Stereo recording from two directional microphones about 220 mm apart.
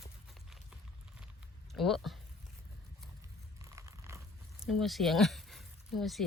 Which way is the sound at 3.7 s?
15° right (ahead or behind).